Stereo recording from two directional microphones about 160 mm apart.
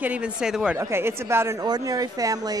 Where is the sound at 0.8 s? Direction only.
15° right (ahead or behind).